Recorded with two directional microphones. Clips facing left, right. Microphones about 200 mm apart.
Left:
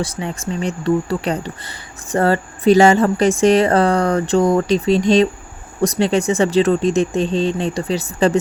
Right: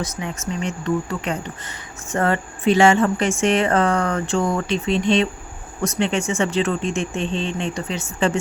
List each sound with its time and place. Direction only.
0.0 s speech: 30° left (ahead or behind)